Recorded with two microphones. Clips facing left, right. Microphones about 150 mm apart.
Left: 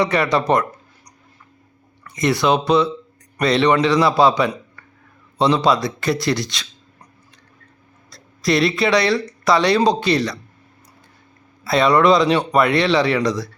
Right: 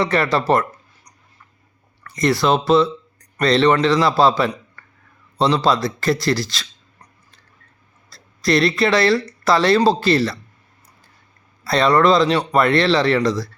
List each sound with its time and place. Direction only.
0.0 s a man's voice: centre (ahead or behind)
2.1 s a man's voice: centre (ahead or behind)
8.1 s a man's voice: centre (ahead or behind)
11.6 s a man's voice: centre (ahead or behind)